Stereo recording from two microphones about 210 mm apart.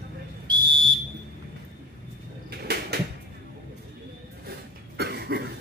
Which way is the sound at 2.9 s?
50° right (ahead or behind).